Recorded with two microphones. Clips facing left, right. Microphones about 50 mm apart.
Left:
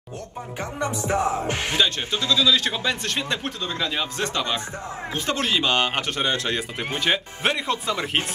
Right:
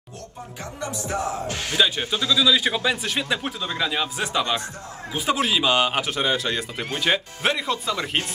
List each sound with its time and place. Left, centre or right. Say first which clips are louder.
0.7 s music: left 4 dB; left
1.8 s a man's voice: right 4 dB; centre